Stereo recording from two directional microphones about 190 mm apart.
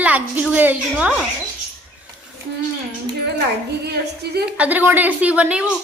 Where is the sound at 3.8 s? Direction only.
60° right (ahead or behind).